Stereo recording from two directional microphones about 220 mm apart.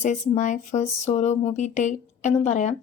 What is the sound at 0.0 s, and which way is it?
A woman's voice, 35° left (ahead or behind).